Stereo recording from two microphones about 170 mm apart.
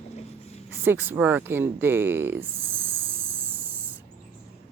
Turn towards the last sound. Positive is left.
turn(degrees=-10)  # may be behind; listen again after turning